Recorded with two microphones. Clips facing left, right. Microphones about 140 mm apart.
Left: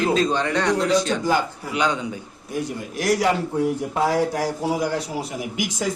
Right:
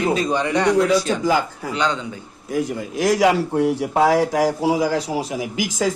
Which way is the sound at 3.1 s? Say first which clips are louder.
Right 3 dB; 90° right.